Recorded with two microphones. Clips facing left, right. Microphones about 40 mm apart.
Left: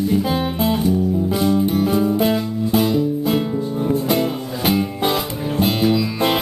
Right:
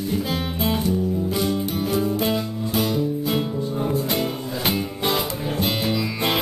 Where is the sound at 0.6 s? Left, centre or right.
Centre.